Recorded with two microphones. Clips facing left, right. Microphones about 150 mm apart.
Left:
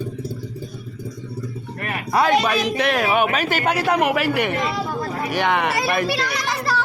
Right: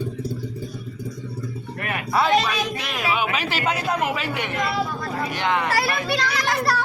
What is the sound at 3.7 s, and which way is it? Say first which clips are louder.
A man's voice: left 5 dB; 70° left (ahead or behind).